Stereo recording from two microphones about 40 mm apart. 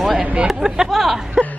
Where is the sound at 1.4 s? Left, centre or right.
Centre.